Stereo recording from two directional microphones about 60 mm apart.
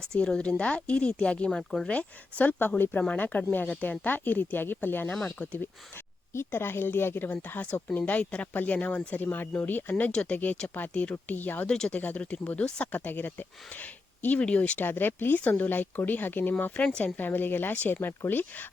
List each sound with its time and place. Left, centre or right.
0.0 s speech: centre
1.5 s speech: centre
1.9 s speech: left
6.3 s speech: left
10.1 s speech: centre
10.3 s speech: left
11.6 s speech: centre
12.9 s speech: left